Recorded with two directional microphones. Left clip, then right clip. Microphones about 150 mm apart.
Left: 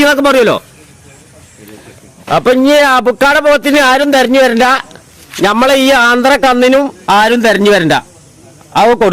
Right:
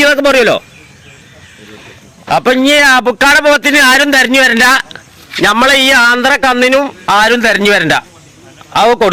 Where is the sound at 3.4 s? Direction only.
Centre (ahead or behind).